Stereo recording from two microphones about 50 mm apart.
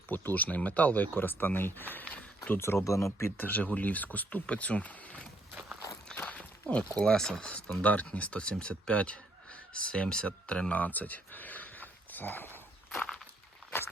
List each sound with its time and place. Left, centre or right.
0.1 s speech: left
1.9 s a sound: left
2.6 s speech: left
3.3 s speech: left
4.4 s speech: left
6.1 s walk: left
7.0 s speech: centre
7.8 s speech: left